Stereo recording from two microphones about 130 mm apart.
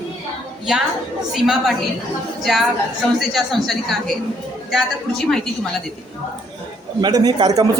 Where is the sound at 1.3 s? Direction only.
Centre (ahead or behind).